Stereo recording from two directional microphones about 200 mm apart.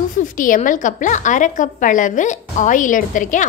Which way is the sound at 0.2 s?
40° left (ahead or behind).